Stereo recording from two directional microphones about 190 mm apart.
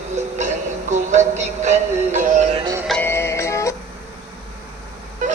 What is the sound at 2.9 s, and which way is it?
Music, 10° left (ahead or behind).